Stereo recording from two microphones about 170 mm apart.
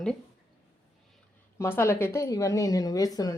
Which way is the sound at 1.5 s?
15° left (ahead or behind).